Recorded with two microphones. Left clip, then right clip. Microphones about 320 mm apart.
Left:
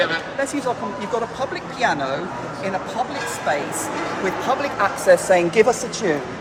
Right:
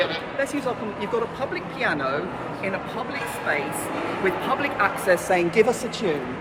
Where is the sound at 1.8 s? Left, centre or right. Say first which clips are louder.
Left 4 dB; left.